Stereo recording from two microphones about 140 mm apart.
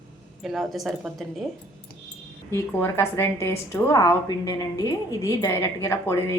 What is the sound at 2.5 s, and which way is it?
A woman's voice, 20° left (ahead or behind).